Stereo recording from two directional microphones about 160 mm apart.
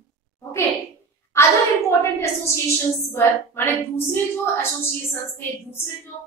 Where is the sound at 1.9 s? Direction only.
15° left (ahead or behind).